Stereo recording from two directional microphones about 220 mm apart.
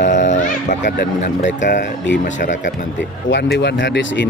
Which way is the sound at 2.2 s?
35° left (ahead or behind).